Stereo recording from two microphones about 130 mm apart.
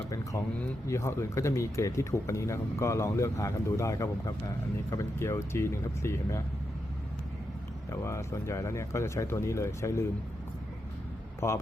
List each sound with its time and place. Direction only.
0.1 s speech: 25° left (ahead or behind)
8.0 s speech: 20° left (ahead or behind)
11.3 s speech: 20° left (ahead or behind)